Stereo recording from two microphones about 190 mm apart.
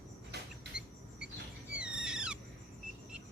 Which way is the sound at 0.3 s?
60° right (ahead or behind).